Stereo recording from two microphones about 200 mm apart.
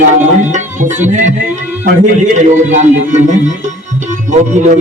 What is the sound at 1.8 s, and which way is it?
Speech, 35° right (ahead or behind).